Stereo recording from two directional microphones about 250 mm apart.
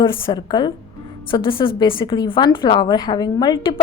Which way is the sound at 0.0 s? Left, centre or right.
Centre.